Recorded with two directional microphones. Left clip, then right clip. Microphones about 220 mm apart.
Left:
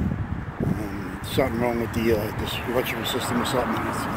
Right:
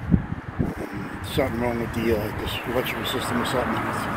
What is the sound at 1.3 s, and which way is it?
Speech, centre (ahead or behind).